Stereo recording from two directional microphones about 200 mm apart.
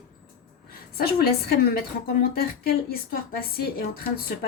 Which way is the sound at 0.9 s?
50° left (ahead or behind).